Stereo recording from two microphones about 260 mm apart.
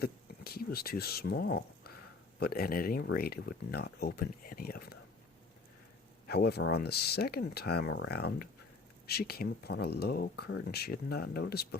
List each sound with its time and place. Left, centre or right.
0.0 s speech: left
6.2 s speech: left